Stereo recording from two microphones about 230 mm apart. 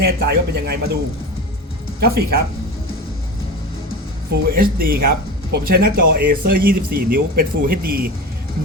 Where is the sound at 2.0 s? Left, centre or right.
Right.